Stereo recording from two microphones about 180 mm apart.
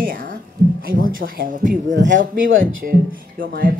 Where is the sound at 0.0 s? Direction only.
50° right (ahead or behind).